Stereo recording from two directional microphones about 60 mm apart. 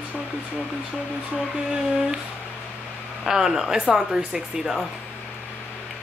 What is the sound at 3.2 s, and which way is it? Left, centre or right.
Speech, centre.